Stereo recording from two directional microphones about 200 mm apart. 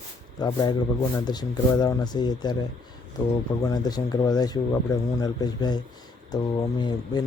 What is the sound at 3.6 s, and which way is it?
Speech, 20° left (ahead or behind).